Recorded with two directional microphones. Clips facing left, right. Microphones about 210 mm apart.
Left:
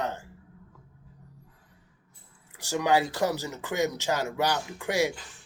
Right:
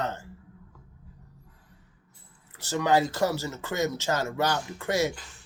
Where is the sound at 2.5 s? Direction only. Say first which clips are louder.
Right 1 dB; 15° left (ahead or behind).